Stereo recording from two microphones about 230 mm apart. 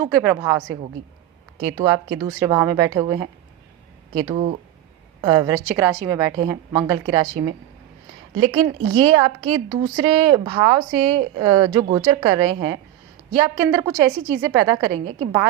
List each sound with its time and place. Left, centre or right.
0.0 s a woman's voice: centre
1.7 s a woman's voice: centre
8.5 s a woman's voice: centre